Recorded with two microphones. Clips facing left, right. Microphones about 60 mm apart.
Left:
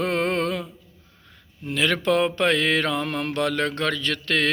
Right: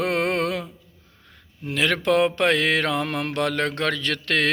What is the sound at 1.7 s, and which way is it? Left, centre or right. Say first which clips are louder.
Mantra: right 1 dB; right.